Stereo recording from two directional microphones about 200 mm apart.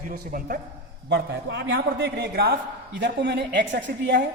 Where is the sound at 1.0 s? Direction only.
60° right (ahead or behind).